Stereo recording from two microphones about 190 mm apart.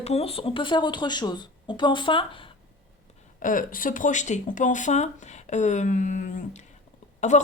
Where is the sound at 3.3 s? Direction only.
45° left (ahead or behind).